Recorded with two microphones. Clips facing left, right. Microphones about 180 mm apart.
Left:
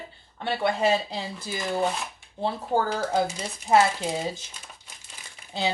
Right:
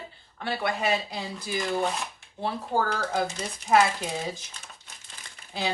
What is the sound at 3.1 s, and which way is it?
Speech, 20° left (ahead or behind).